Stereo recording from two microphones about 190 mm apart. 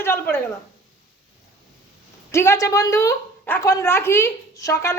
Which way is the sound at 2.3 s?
15° left (ahead or behind).